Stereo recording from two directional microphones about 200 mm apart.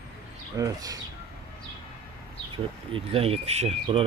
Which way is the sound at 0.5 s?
15° right (ahead or behind).